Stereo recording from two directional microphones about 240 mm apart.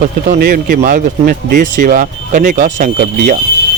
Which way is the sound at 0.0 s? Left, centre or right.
Right.